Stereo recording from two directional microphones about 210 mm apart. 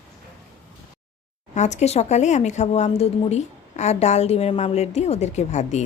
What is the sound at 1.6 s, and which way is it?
A woman's voice, 35° left (ahead or behind).